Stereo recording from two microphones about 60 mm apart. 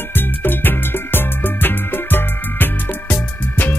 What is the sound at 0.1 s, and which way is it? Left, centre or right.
Music, left.